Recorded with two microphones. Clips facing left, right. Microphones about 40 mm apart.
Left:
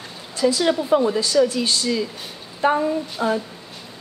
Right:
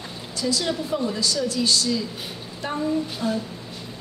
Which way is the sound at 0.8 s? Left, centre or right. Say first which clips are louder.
Left 8 dB; left.